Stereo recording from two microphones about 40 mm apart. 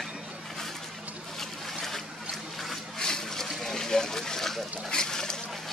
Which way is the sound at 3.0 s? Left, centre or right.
Centre.